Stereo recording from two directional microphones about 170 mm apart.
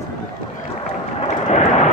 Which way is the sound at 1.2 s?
40° left (ahead or behind).